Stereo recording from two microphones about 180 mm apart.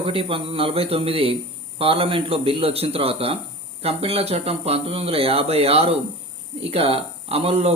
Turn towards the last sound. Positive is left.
turn(degrees=-35)  # may be behind; listen again after turning